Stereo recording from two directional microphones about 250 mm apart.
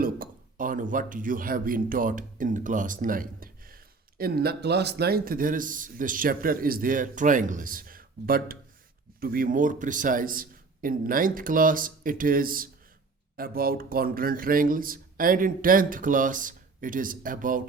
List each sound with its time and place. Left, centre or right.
0.0 s speech: right